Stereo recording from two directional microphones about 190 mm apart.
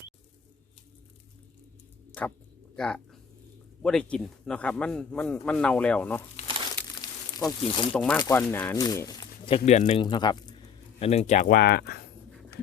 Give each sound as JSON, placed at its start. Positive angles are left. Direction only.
{"t": 2.7, "sound": "a man's voice", "side_deg": 5}
{"t": 7.0, "sound": "a sound", "side_deg": 20}
{"t": 7.9, "sound": "a man's voice", "side_deg": 5}
{"t": 9.6, "sound": "speech", "side_deg": 40}
{"t": 10.0, "sound": "speech", "side_deg": 25}